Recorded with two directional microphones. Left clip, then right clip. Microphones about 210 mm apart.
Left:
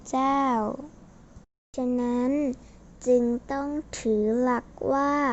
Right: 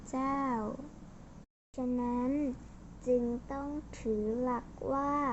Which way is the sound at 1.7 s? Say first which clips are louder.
Left 8 dB; 45° left (ahead or behind).